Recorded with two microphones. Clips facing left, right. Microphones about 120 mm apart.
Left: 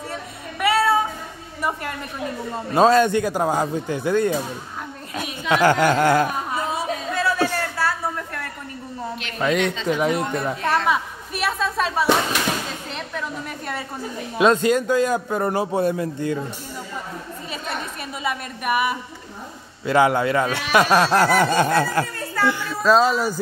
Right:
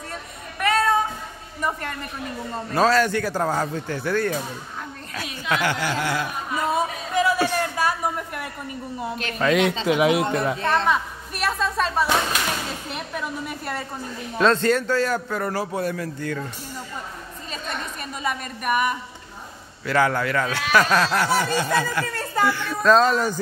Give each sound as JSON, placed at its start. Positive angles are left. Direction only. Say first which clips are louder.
{"t": 0.6, "sound": "meow", "louder": "left 2 dB", "side_deg": 5}
{"t": 1.6, "sound": "a woman's voice", "louder": "left 1 dB", "side_deg": 10}
{"t": 2.7, "sound": "a man's voice", "louder": "left 4 dB", "side_deg": 20}
{"t": 5.5, "sound": "speech", "louder": "left 7 dB", "side_deg": 40}
{"t": 7.2, "sound": "a sound", "louder": "right 2 dB", "side_deg": -15}
{"t": 9.4, "sound": "music", "louder": "right 1 dB", "side_deg": 0}
{"t": 10.9, "sound": "a woman's voice", "louder": "left 1 dB", "side_deg": 0}
{"t": 14.4, "sound": "a man's voice", "louder": "left 2 dB", "side_deg": 10}
{"t": 18.2, "sound": "music", "louder": "left 1 dB", "side_deg": 5}
{"t": 19.9, "sound": "a man's voice", "louder": "left 4 dB", "side_deg": 20}
{"t": 21.2, "sound": "speech", "louder": "left 5 dB", "side_deg": 55}
{"t": 22.6, "sound": "music", "louder": "even", "side_deg": 5}